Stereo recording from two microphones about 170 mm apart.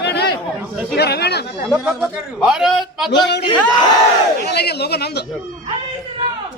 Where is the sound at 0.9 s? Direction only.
75° left (ahead or behind).